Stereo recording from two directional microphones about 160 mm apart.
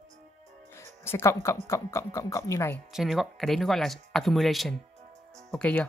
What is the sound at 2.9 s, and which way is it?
Speech, centre (ahead or behind).